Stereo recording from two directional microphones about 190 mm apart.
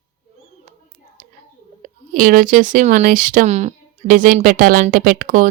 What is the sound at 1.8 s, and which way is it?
Speech, 45° right (ahead or behind).